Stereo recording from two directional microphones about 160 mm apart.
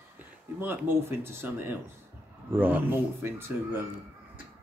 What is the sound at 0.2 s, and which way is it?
Speech, 15° right (ahead or behind).